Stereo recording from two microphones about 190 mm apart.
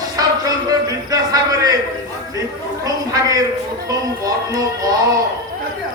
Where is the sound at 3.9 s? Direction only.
20° right (ahead or behind).